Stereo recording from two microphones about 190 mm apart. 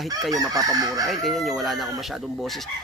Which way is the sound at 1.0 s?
Centre (ahead or behind).